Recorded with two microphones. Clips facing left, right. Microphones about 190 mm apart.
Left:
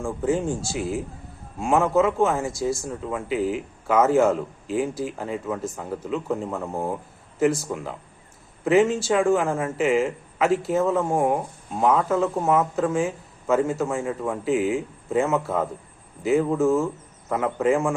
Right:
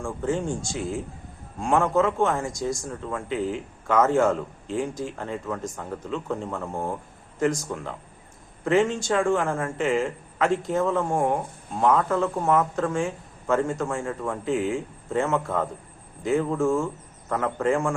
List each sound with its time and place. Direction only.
0.0 s speech: 5° left (ahead or behind)